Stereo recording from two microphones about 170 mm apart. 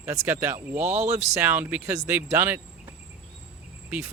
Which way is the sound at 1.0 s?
40° right (ahead or behind).